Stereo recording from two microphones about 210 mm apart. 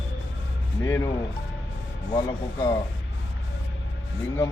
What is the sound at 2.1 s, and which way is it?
Speech, 15° left (ahead or behind).